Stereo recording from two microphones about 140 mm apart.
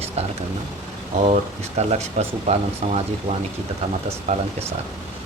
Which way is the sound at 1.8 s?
50° right (ahead or behind).